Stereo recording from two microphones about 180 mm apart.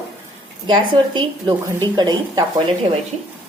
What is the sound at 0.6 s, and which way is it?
A woman's voice, 25° right (ahead or behind).